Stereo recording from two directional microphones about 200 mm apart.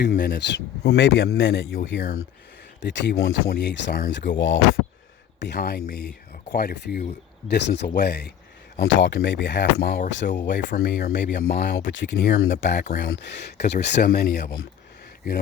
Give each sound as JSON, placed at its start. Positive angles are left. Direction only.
{"t": 0.2, "sound": "speech", "side_deg": 55}
{"t": 3.5, "sound": "speech", "side_deg": 55}
{"t": 5.4, "sound": "speech", "side_deg": 55}
{"t": 12.8, "sound": "speech", "side_deg": 50}